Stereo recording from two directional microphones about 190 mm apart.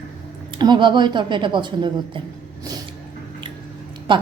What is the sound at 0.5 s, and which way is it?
A woman's voice, 25° right (ahead or behind).